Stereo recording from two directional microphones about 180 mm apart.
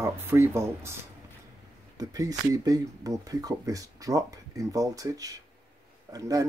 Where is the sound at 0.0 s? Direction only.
15° right (ahead or behind).